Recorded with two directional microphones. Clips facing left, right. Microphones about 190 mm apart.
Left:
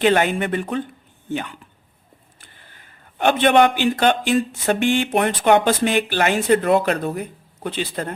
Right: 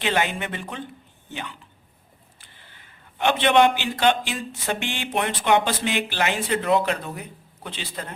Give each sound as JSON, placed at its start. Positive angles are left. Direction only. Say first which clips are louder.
{"t": 0.0, "sound": "a man's voice", "louder": "left 7 dB", "side_deg": 50}